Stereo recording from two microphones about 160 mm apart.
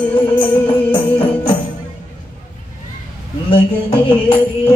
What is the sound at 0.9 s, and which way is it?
Music, 35° left (ahead or behind).